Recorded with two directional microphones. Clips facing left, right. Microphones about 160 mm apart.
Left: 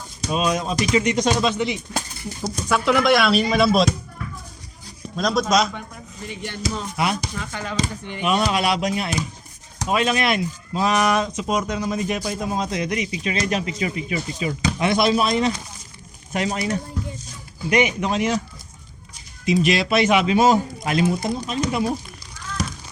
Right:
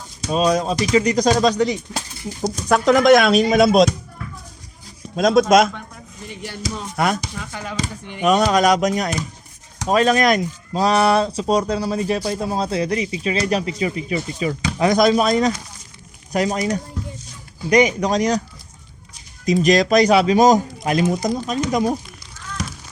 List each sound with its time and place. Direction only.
0.3 s speech: 35° right (ahead or behind)
5.1 s speech: 55° right (ahead or behind)
6.2 s speech: 5° right (ahead or behind)
6.9 s speech: 50° right (ahead or behind)
7.3 s speech: 10° right (ahead or behind)
8.2 s speech: 45° right (ahead or behind)
19.5 s speech: 40° right (ahead or behind)